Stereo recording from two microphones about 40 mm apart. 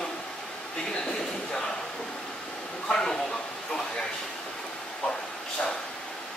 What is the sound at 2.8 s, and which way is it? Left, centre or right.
Speech, centre.